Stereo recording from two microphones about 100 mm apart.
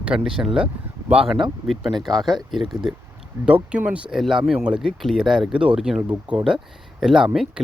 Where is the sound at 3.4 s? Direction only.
15° right (ahead or behind).